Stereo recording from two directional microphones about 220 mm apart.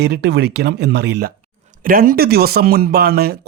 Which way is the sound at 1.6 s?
35° right (ahead or behind).